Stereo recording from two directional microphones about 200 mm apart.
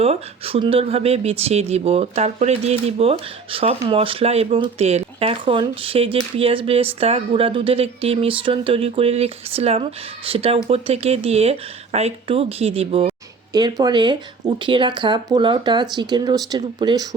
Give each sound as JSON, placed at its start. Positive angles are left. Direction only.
{"t": 0.0, "sound": "speech", "side_deg": -30}